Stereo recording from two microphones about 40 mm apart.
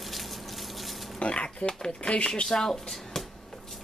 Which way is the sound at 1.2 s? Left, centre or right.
Left.